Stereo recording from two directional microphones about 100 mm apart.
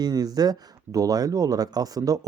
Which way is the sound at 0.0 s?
40° right (ahead or behind).